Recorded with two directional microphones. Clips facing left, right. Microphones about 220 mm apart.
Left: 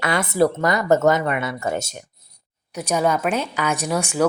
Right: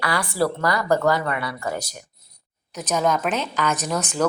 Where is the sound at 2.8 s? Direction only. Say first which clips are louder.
Left 2 dB; 10° left (ahead or behind).